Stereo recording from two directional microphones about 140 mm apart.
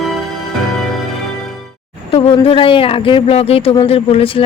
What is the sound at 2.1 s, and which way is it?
A man's voice, 40° left (ahead or behind).